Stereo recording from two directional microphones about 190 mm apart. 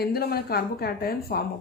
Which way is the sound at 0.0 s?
55° left (ahead or behind).